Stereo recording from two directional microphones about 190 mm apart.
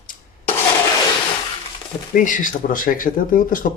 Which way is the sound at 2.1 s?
45° left (ahead or behind).